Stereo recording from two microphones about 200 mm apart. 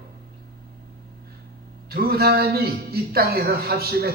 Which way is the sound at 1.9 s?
50° right (ahead or behind).